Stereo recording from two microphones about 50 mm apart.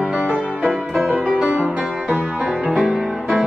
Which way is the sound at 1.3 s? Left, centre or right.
Centre.